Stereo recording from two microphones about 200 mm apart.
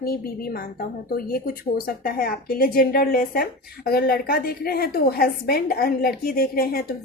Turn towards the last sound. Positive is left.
turn(degrees=50)  # may be behind; listen again after turning